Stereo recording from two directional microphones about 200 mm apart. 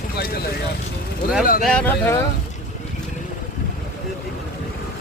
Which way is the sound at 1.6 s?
5° left (ahead or behind).